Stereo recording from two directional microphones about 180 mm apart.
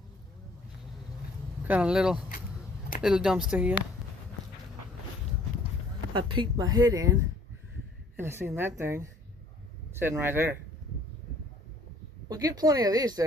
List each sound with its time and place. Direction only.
1.6 s a woman's voice: 5° right (ahead or behind)
6.1 s speech: 25° right (ahead or behind)
8.2 s a woman's voice: 15° right (ahead or behind)
12.3 s speech: 20° right (ahead or behind)